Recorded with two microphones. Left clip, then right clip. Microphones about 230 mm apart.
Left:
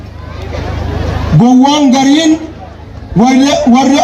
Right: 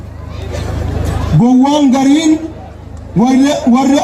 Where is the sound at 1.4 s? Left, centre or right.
Left.